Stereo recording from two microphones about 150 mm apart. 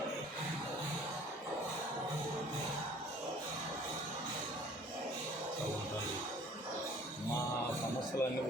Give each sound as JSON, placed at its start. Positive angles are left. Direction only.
{"t": 8.2, "sound": "speech", "side_deg": 15}